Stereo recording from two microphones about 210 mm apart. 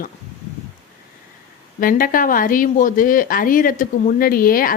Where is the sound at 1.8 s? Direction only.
40° left (ahead or behind).